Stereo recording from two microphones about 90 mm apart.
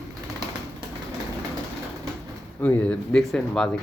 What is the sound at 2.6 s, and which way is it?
A man's voice, 15° left (ahead or behind).